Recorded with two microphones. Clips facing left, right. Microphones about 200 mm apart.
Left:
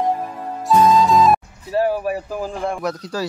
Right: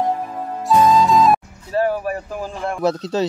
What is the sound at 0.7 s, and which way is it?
Music, centre (ahead or behind).